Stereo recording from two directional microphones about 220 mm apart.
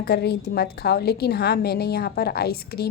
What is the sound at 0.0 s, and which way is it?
A woman's voice, 45° left (ahead or behind).